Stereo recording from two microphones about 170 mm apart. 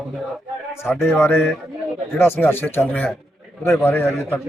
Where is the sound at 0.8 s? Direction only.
15° left (ahead or behind).